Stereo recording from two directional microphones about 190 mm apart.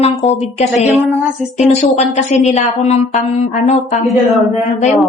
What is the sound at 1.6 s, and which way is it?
Speech, 35° left (ahead or behind).